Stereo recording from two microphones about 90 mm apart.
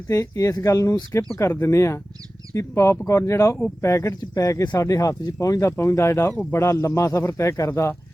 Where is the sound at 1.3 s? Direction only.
25° left (ahead or behind).